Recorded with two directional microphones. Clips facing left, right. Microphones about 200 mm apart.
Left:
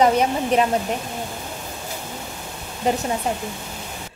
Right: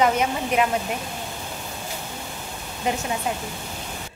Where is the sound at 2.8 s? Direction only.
35° left (ahead or behind).